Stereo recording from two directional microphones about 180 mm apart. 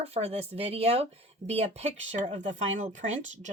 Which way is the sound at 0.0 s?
35° right (ahead or behind).